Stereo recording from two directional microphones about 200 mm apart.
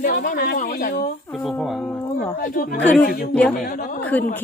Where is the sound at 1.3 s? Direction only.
Centre (ahead or behind).